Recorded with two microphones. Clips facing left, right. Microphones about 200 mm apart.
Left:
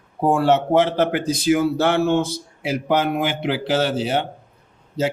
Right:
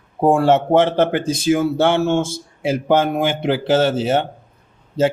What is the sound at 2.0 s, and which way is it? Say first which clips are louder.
A man's voice: right 1 dB; 50° right (ahead or behind).